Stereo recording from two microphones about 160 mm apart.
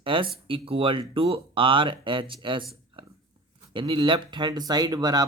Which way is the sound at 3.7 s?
30° right (ahead or behind).